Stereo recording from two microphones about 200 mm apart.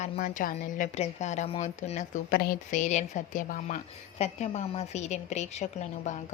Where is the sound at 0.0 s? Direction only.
40° left (ahead or behind).